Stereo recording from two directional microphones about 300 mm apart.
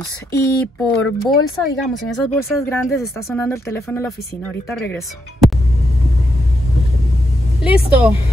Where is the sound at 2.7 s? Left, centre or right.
Centre.